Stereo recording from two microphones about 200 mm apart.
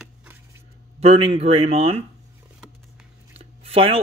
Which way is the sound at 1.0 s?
30° right (ahead or behind).